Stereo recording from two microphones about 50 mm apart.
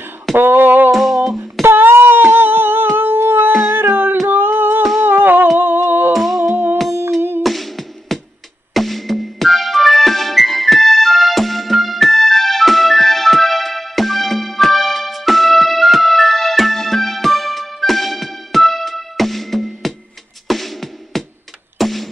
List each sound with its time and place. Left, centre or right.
0.4 s a sound: right
0.9 s music: centre
1.3 s humming: right
3.0 s a sound: right
3.7 s music: right
4.3 s a sound: right
5.0 s humming: right
6.1 s music: centre
6.5 s music: right
7.4 s music: centre
21.7 s tick-tock: centre